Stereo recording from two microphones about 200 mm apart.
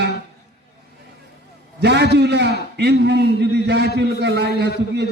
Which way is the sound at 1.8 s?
55° right (ahead or behind).